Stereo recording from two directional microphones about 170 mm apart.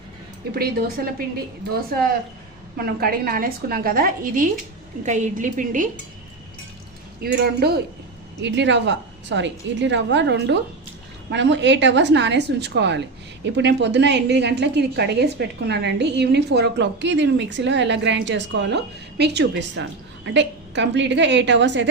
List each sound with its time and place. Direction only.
0.5 s a woman's voice: 65° right (ahead or behind)
2.7 s a woman's voice: 60° right (ahead or behind)
7.2 s speech: 65° right (ahead or behind)
8.4 s a woman's voice: 90° right